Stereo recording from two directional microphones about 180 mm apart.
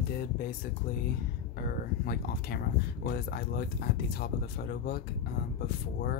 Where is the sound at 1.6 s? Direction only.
60° left (ahead or behind).